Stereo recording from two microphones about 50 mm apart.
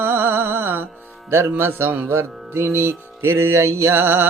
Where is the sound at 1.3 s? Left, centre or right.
Right.